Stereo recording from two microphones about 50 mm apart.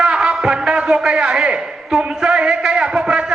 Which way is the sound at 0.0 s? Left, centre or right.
Centre.